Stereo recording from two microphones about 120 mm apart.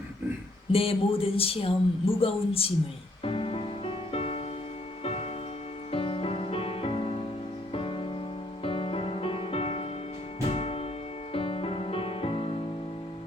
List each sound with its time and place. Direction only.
0.7 s speech: 50° left (ahead or behind)
3.2 s music: 50° left (ahead or behind)